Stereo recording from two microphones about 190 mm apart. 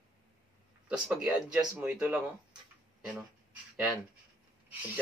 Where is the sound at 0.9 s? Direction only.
Centre (ahead or behind).